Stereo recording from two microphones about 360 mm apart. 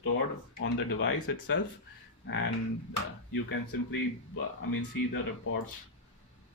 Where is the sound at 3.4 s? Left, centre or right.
Left.